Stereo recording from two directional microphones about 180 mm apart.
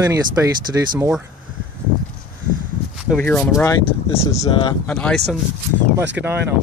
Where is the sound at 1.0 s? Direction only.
5° right (ahead or behind).